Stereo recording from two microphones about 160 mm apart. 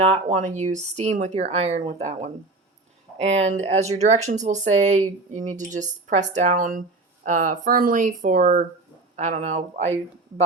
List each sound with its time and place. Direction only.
0.1 s speech: 50° right (ahead or behind)
9.1 s speech: 50° right (ahead or behind)